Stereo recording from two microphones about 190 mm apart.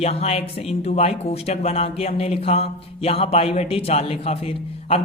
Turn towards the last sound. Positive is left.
turn(degrees=35)  # may be behind; listen again after turning